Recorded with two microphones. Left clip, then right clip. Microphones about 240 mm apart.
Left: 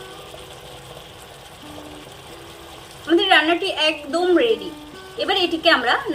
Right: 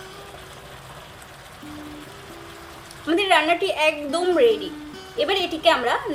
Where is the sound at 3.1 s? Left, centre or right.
Right.